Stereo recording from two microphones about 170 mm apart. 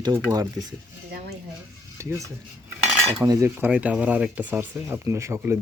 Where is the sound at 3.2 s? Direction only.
15° right (ahead or behind).